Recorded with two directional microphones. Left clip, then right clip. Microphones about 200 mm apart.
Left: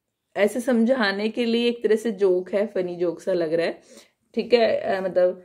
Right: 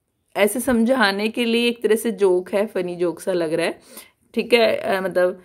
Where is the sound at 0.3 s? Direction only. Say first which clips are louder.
Right 2 dB; 30° right (ahead or behind).